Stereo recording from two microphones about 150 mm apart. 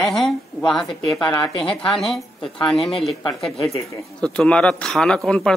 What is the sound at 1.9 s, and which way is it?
A man's voice, centre (ahead or behind).